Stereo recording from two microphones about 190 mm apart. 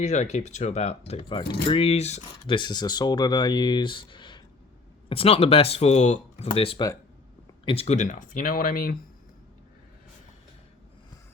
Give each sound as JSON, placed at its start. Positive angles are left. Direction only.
{"t": 0.0, "sound": "speech", "side_deg": 35}
{"t": 2.6, "sound": "speech", "side_deg": 20}